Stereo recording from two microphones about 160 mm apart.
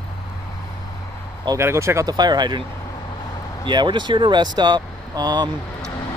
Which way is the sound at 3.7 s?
30° right (ahead or behind).